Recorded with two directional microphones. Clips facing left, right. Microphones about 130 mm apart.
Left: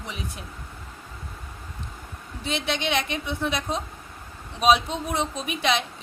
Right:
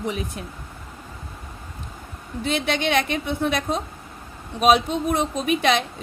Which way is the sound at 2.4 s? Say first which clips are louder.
Right 4 dB; 55° right (ahead or behind).